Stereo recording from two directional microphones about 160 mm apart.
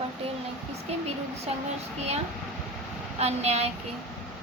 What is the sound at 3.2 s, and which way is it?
Speech, 40° right (ahead or behind).